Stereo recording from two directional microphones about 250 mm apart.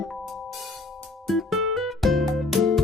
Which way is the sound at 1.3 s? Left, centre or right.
Centre.